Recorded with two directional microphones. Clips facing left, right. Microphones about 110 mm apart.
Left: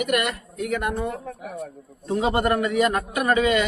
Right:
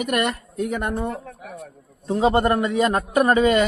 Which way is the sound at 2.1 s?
30° right (ahead or behind).